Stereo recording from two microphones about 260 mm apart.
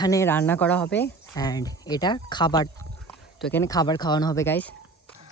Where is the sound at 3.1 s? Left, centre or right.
Centre.